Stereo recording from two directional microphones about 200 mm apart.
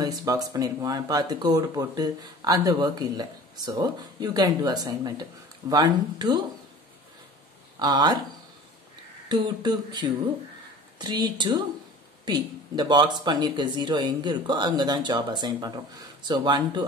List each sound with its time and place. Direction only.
0.0 s speech: 20° right (ahead or behind)
7.8 s speech: 20° right (ahead or behind)
9.3 s speech: 20° right (ahead or behind)